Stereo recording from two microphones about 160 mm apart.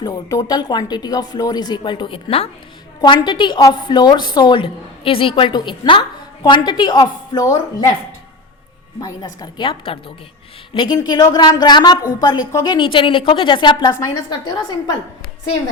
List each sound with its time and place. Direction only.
0.0 s a woman's voice: 20° left (ahead or behind)
9.0 s a woman's voice: 25° left (ahead or behind)